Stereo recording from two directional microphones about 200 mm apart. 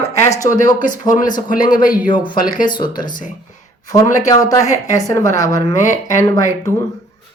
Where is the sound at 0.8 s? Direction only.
40° left (ahead or behind).